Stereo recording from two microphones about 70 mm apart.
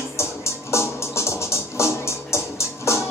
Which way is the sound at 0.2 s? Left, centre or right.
Left.